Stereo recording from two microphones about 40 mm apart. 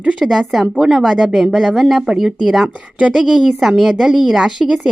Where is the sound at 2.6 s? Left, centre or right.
Right.